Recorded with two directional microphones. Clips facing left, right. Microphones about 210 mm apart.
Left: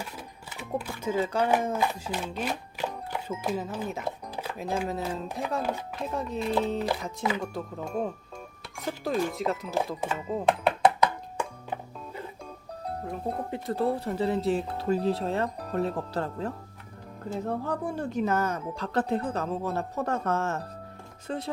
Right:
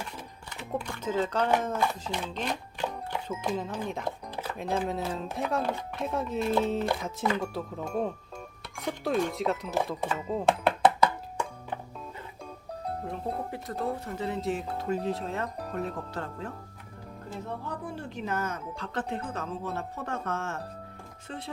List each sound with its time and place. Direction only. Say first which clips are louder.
0.0 s speech: left 1 dB; 5° left (ahead or behind)
11.0 s music: even; 15° left (ahead or behind)
13.5 s speech: left 5 dB; 30° left (ahead or behind)